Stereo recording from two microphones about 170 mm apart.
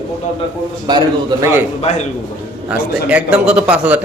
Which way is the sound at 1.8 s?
35° left (ahead or behind).